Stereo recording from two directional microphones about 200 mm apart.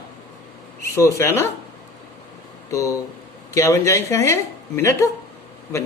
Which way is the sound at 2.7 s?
15° left (ahead or behind).